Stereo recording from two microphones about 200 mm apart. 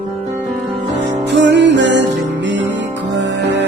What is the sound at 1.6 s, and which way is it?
Music, 60° right (ahead or behind).